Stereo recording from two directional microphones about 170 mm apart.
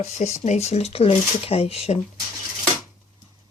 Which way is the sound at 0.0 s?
40° left (ahead or behind).